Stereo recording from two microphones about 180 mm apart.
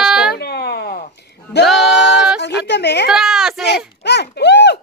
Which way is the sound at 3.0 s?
Centre (ahead or behind).